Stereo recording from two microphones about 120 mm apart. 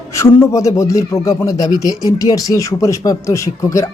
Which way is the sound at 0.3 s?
25° left (ahead or behind).